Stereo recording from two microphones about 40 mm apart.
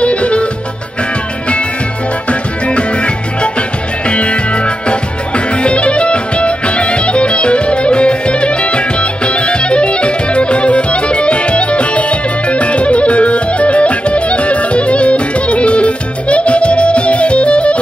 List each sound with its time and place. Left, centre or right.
0.0 s music: left
2.2 s music: left
4.1 s music: left